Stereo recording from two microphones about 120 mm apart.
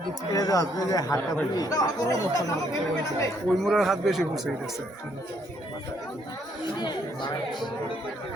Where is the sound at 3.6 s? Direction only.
Centre (ahead or behind).